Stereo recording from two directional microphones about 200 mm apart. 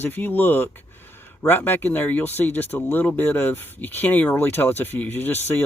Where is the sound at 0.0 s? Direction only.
10° left (ahead or behind).